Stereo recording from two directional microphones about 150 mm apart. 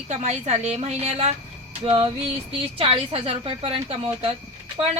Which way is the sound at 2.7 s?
40° right (ahead or behind).